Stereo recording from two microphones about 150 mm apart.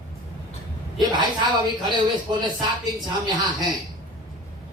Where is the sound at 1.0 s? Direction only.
30° right (ahead or behind).